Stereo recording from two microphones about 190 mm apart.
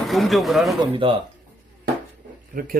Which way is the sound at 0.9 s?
25° right (ahead or behind).